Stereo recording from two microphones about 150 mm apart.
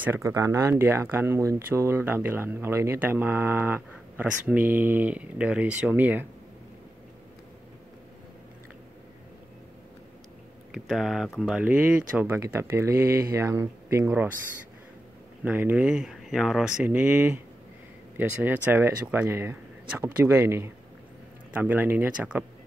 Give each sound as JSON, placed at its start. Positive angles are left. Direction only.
{"t": 0.0, "sound": "speech", "side_deg": -20}
{"t": 10.7, "sound": "speech", "side_deg": 0}
{"t": 15.4, "sound": "speech", "side_deg": -10}